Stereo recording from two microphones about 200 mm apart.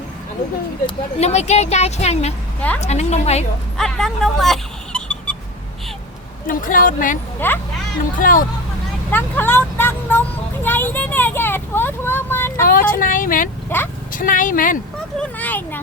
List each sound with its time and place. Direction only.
0.9 s speech: 35° left (ahead or behind)
2.6 s a child's voice: 5° left (ahead or behind)
2.8 s speech: 35° left (ahead or behind)
3.8 s a sound: centre (ahead or behind)
6.5 s a woman's voice: 45° left (ahead or behind)
7.3 s speech: 10° left (ahead or behind)
8.2 s a woman's voice: 45° left (ahead or behind)
9.0 s speech: 10° left (ahead or behind)
12.6 s speech: 45° left (ahead or behind)
13.7 s speech: 10° left (ahead or behind)
14.1 s a woman's voice: 40° left (ahead or behind)
15.2 s a child's voice: 10° left (ahead or behind)